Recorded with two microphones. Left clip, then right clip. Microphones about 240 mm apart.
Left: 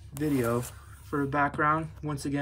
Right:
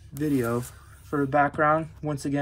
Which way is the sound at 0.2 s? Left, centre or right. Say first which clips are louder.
Right 2 dB; centre.